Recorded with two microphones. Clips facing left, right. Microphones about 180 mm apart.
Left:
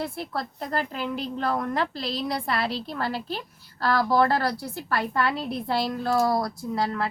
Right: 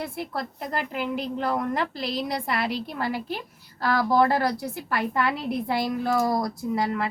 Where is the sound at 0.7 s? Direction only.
15° right (ahead or behind).